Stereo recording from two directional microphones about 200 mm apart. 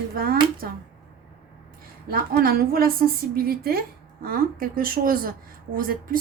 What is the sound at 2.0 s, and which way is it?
Speech, 50° right (ahead or behind).